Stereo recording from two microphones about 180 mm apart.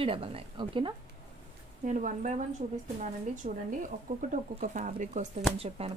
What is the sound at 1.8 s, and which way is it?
Speech, 45° right (ahead or behind).